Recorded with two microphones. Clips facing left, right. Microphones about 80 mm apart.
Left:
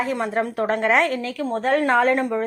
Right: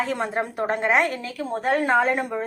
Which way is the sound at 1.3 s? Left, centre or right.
Centre.